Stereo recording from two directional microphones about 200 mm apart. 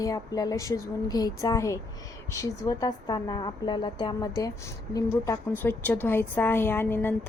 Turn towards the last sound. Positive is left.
turn(degrees=10)  # may be behind; listen again after turning